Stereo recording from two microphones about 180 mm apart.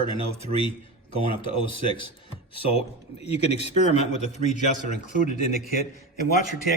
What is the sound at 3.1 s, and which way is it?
A man's voice, 35° left (ahead or behind).